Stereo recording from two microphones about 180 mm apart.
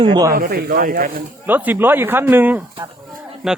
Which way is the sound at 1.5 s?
10° right (ahead or behind).